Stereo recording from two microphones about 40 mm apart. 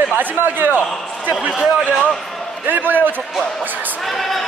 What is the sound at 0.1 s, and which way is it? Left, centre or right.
Speech, right.